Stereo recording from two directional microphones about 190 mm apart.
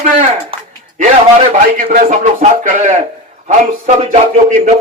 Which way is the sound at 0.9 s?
40° right (ahead or behind).